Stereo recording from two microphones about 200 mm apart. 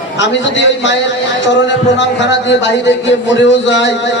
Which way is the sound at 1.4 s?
65° left (ahead or behind).